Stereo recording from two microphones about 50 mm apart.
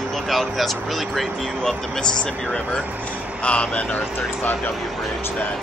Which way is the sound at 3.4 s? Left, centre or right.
Left.